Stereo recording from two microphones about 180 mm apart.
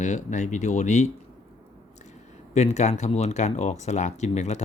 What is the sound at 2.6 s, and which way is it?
Speech, 40° left (ahead or behind).